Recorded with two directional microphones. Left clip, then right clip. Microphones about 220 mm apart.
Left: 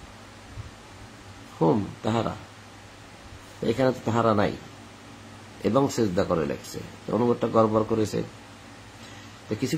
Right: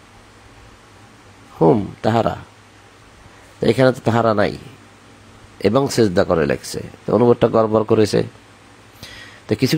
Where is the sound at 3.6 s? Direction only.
35° right (ahead or behind).